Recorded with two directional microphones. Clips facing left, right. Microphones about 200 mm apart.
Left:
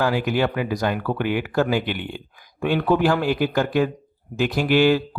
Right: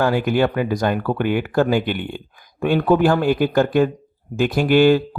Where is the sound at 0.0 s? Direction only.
50° right (ahead or behind).